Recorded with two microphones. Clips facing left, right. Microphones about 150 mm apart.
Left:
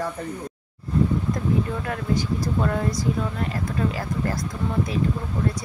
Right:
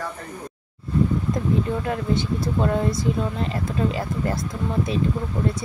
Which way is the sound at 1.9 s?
25° right (ahead or behind).